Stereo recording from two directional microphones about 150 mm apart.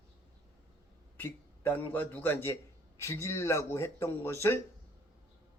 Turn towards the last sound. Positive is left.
turn(degrees=20)  # may be behind; listen again after turning